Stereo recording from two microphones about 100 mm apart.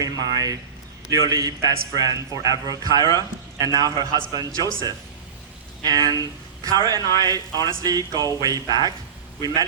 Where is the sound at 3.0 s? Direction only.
40° left (ahead or behind).